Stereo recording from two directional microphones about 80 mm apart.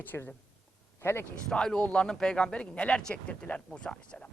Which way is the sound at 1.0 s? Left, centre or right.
Left.